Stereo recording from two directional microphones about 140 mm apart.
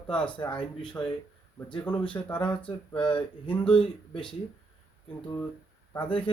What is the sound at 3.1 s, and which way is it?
Speech, 35° left (ahead or behind).